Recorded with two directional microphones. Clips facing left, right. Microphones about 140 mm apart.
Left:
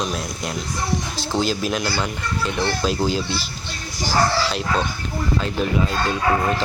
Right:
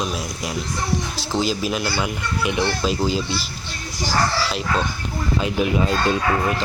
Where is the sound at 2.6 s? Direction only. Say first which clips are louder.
Even; centre (ahead or behind).